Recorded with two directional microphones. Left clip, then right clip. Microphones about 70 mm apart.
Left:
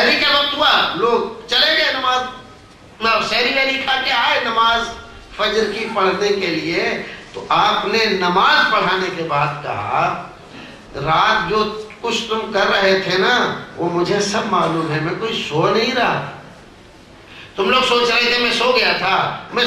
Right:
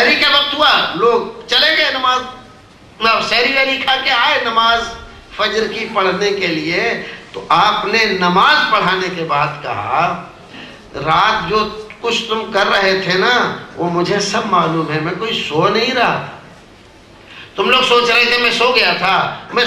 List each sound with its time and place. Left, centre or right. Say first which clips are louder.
0.0 s a sound: right 3 dB; right
3.0 s a man's voice: right 3 dB; right
17.6 s a man's voice: right 3 dB; right